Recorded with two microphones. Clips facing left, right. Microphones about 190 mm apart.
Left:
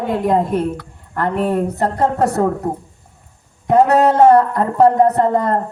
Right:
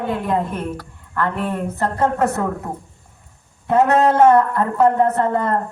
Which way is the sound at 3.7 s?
35° left (ahead or behind).